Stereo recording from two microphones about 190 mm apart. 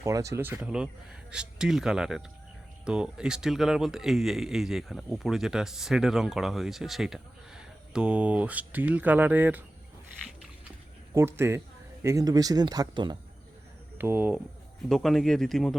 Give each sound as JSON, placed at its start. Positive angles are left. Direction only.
{"t": 0.0, "sound": "speech", "side_deg": -15}
{"t": 11.1, "sound": "speech", "side_deg": -15}
{"t": 14.0, "sound": "speech", "side_deg": -10}